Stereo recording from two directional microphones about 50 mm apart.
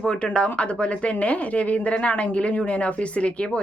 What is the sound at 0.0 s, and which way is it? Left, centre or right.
A woman's voice, centre.